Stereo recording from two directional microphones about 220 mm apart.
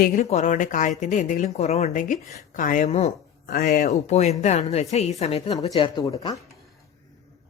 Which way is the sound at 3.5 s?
40° left (ahead or behind).